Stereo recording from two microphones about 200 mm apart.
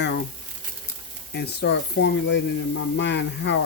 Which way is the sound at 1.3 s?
55° left (ahead or behind).